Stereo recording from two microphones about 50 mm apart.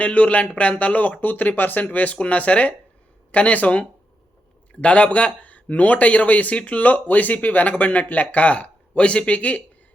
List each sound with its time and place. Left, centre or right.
0.0 s speech: left